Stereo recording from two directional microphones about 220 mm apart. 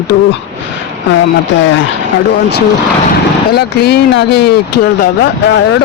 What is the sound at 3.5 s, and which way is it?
Speech, 50° left (ahead or behind).